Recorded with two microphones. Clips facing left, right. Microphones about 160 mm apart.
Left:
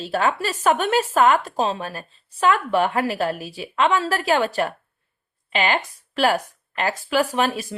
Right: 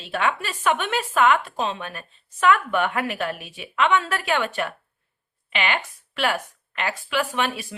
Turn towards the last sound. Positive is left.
turn(degrees=40)  # may be behind; listen again after turning